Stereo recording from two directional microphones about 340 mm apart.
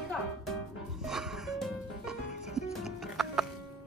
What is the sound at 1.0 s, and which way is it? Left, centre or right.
Music, centre.